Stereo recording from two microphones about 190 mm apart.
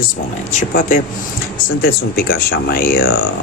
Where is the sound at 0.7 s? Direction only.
45° left (ahead or behind).